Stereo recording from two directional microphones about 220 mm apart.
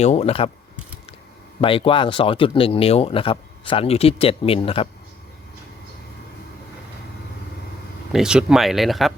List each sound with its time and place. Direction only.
0.0 s speech: 30° left (ahead or behind)
1.6 s speech: 25° left (ahead or behind)
8.1 s speech: 5° right (ahead or behind)